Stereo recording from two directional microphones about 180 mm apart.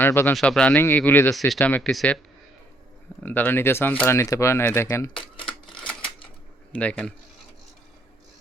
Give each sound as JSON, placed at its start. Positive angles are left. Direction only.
{"t": 0.0, "sound": "speech", "side_deg": 10}
{"t": 3.2, "sound": "speech", "side_deg": 10}
{"t": 5.1, "sound": "typing", "side_deg": 30}
{"t": 5.7, "sound": "typewriter", "side_deg": 5}
{"t": 6.7, "sound": "speech", "side_deg": 5}